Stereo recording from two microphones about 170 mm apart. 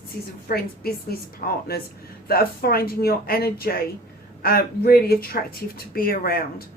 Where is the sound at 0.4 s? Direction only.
60° left (ahead or behind).